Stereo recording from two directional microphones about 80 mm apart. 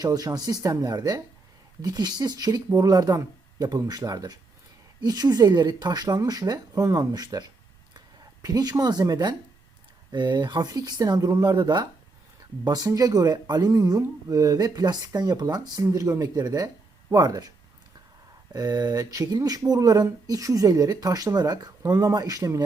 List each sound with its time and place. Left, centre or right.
0.0 s speech: right
7.9 s a sound: right
8.8 s speech: right
15.9 s speech: right
18.5 s speech: right